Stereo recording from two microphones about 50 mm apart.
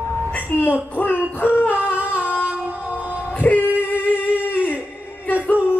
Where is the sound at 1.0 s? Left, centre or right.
Left.